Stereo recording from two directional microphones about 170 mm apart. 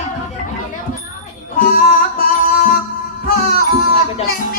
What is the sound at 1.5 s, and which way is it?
Music, 55° left (ahead or behind).